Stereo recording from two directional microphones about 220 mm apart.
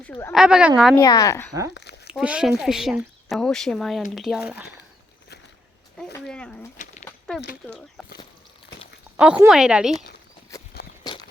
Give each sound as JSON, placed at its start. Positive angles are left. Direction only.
{"t": 0.0, "sound": "speech", "side_deg": 10}
{"t": 0.3, "sound": "speech", "side_deg": -5}
{"t": 0.9, "sound": "speech", "side_deg": 15}
{"t": 1.7, "sound": "a sound", "side_deg": 50}
{"t": 2.0, "sound": "speech", "side_deg": -5}
{"t": 6.0, "sound": "speech", "side_deg": 5}
{"t": 6.7, "sound": "bird", "side_deg": 30}
{"t": 7.3, "sound": "speech", "side_deg": 0}
{"t": 9.1, "sound": "speech", "side_deg": -5}
{"t": 11.0, "sound": "walk", "side_deg": 20}